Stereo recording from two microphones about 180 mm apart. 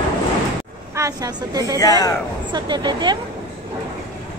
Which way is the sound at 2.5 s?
25° right (ahead or behind).